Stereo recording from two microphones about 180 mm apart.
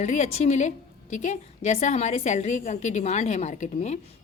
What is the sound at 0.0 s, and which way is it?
A woman's voice, 40° left (ahead or behind).